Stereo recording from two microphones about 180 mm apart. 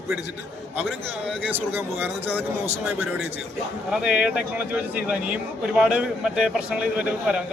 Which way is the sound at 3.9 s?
5° right (ahead or behind).